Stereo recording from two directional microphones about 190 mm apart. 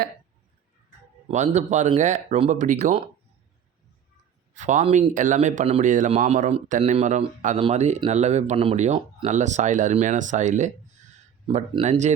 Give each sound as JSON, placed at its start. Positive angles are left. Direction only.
{"t": 1.3, "sound": "speech", "side_deg": -35}
{"t": 4.5, "sound": "speech", "side_deg": -40}